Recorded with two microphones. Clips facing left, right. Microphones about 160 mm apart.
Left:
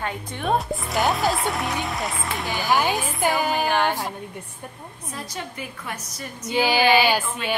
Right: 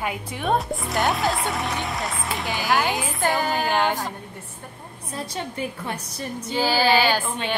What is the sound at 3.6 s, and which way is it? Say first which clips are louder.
Speech: even; 15° right (ahead or behind).